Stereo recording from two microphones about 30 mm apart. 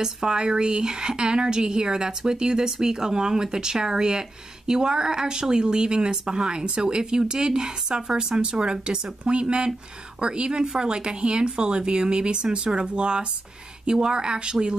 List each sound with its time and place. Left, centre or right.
0.0 s speech: right
9.2 s speech: right